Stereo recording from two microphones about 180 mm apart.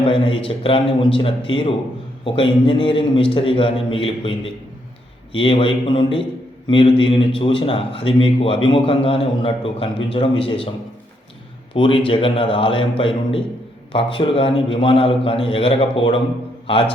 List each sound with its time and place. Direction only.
0.0 s a man's voice: 30° left (ahead or behind)
11.7 s a man's voice: 30° left (ahead or behind)